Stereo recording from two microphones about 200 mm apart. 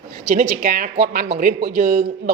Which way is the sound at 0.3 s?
45° right (ahead or behind).